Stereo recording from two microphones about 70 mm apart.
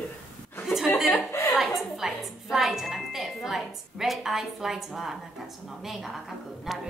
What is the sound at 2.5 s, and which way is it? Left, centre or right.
Wind chime, centre.